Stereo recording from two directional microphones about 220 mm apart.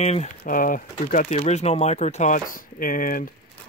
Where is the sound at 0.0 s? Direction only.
30° left (ahead or behind).